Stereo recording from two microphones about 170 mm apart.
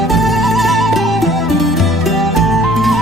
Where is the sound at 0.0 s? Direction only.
Centre (ahead or behind).